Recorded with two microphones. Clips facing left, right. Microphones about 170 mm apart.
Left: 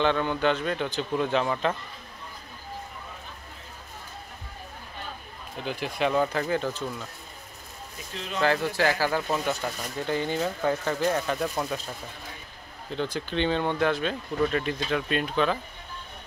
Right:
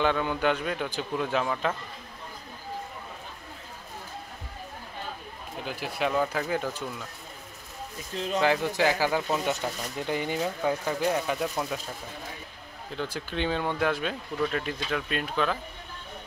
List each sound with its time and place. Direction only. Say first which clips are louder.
0.0 s speech: left 1 dB; 10° right (ahead or behind)
5.7 s speech: left 3 dB; 5° right (ahead or behind)
8.4 s speech: even; 15° right (ahead or behind)
12.9 s speech: left 4 dB; 5° right (ahead or behind)